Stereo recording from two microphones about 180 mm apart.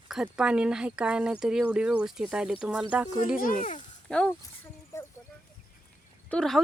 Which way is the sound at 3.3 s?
50° left (ahead or behind).